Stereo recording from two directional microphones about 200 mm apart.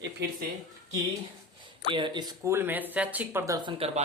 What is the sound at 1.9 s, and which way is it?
Speech, 25° right (ahead or behind).